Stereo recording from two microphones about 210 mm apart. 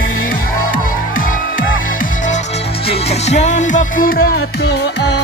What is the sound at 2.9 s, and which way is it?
Music, 30° left (ahead or behind).